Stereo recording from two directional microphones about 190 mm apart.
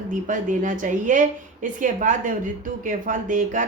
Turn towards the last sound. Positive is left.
turn(degrees=-45)  # may be behind; listen again after turning